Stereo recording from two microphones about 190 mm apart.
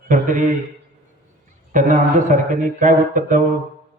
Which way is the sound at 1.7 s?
40° right (ahead or behind).